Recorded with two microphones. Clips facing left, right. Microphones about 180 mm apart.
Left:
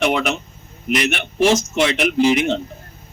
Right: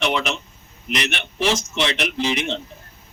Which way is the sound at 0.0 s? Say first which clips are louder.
Left 4 dB; 50° left (ahead or behind).